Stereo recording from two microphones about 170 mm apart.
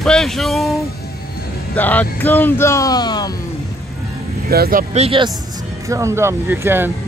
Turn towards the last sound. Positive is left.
turn(degrees=-15)  # may be behind; listen again after turning